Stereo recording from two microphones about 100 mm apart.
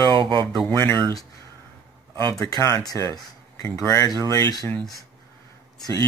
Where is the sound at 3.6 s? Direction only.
30° left (ahead or behind).